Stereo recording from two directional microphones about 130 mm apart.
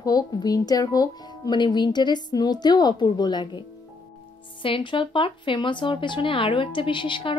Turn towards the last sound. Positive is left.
turn(degrees=40)  # may be behind; listen again after turning